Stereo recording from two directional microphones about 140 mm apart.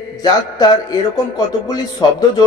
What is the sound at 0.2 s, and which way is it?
Speech, 30° left (ahead or behind).